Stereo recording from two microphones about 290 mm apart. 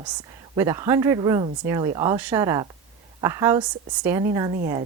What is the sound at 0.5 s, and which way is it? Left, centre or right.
Speech, centre.